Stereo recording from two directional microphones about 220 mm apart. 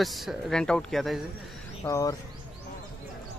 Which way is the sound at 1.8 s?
15° left (ahead or behind).